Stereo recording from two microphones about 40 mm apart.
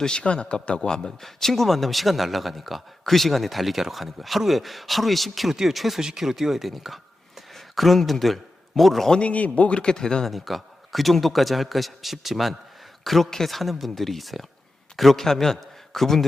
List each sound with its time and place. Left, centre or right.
0.0 s speech: left
1.2 s a man's voice: centre
9.2 s speech: left
9.9 s speech: centre
10.2 s a man's voice: centre